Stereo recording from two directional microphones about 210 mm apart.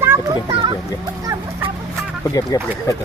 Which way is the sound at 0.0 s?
10° right (ahead or behind).